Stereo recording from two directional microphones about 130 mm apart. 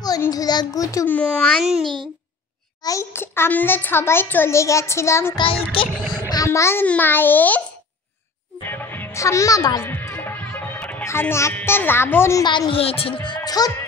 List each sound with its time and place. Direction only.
0.3 s a child's voice: 30° left (ahead or behind)
1.0 s a child's voice: 10° left (ahead or behind)
1.6 s a child's voice: centre (ahead or behind)
2.8 s a child's voice: 25° left (ahead or behind)
5.4 s child singing: 45° left (ahead or behind)
6.1 s a child's voice: 30° left (ahead or behind); by 7.6 s 15° left (ahead or behind)
8.6 s music: 15° left (ahead or behind)
9.8 s music: 20° left (ahead or behind)
12.4 s a woman's voice: 40° left (ahead or behind)